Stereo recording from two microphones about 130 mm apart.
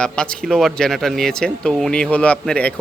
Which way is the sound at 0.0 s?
5° left (ahead or behind).